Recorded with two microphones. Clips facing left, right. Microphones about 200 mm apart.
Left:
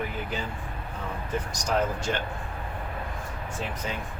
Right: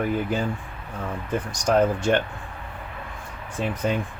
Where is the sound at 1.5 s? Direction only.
55° right (ahead or behind).